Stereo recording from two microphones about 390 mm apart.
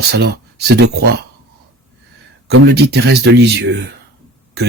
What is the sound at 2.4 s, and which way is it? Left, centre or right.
Speech, right.